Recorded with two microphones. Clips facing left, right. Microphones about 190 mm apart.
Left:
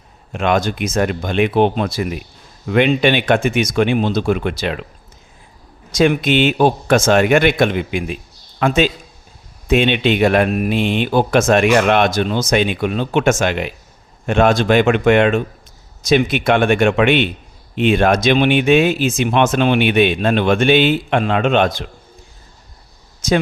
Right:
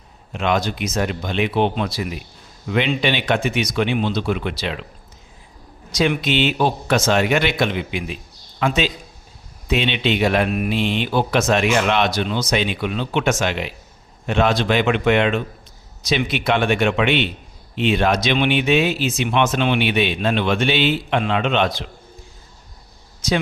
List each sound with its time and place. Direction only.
0.3 s speech: 50° left (ahead or behind)
5.9 s speech: 50° left (ahead or behind)
23.2 s speech: 50° left (ahead or behind)